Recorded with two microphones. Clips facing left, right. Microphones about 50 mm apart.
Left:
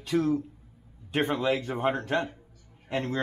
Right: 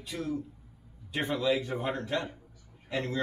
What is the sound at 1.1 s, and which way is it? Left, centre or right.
Speech, left.